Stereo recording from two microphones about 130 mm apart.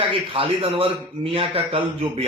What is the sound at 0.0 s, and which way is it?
A man's voice, 45° right (ahead or behind).